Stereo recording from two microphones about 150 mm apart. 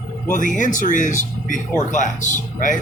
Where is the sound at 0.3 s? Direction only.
60° left (ahead or behind).